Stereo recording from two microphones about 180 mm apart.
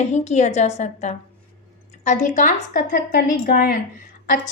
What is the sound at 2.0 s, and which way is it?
A woman's voice, 45° left (ahead or behind).